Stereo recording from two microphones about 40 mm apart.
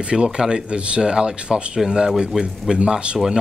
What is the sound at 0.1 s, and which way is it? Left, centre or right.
Speech, right.